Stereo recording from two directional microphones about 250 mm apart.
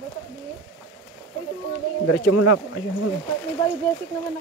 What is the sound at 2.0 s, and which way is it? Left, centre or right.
Speech, left.